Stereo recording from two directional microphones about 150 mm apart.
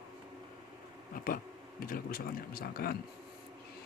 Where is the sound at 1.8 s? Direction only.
75° left (ahead or behind).